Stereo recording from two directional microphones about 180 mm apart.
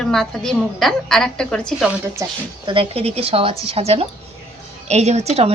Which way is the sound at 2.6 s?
30° right (ahead or behind).